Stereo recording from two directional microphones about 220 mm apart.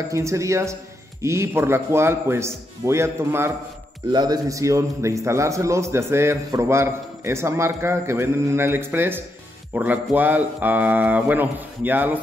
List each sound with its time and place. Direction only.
0.1 s a man's voice: 15° right (ahead or behind)